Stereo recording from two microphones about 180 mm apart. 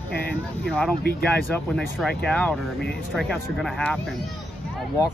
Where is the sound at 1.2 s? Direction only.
5° left (ahead or behind).